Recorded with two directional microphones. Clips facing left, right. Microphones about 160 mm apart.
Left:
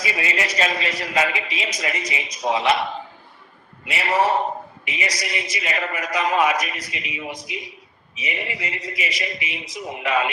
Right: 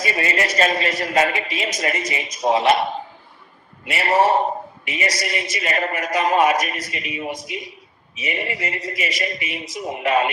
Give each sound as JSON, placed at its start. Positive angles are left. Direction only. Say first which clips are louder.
{"t": 0.0, "sound": "a man's voice", "louder": "right 3 dB", "side_deg": -50}
{"t": 4.1, "sound": "a man's voice", "louder": "right 3 dB", "side_deg": -25}
{"t": 4.9, "sound": "a man's voice", "louder": "right 4 dB", "side_deg": -50}